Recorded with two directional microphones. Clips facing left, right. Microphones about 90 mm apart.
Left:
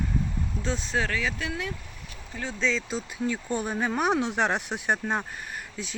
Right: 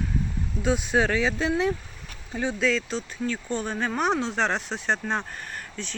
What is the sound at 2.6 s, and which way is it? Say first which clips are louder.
Speech: right 1 dB; centre (ahead or behind).